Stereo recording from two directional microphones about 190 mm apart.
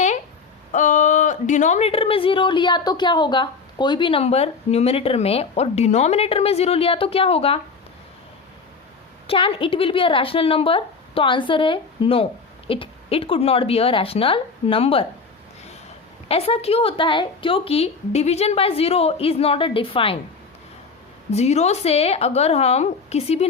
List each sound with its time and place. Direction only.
0.7 s speech: 40° left (ahead or behind)
9.2 s a woman's voice: 30° left (ahead or behind)
16.3 s speech: 30° left (ahead or behind)
21.2 s speech: 35° left (ahead or behind)